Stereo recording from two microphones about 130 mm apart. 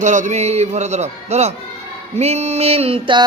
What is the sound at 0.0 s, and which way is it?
A man's voice, 65° right (ahead or behind).